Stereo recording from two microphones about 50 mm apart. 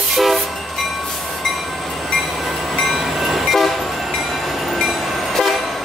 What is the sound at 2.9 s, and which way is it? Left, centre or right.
Train, centre.